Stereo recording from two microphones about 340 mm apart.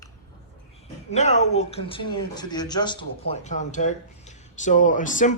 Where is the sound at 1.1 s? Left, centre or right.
Centre.